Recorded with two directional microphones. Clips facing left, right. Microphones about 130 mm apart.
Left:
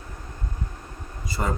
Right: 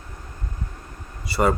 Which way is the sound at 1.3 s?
75° right (ahead or behind).